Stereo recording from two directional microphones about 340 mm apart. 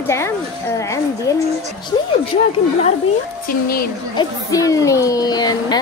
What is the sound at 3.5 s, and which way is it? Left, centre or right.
Speech, left.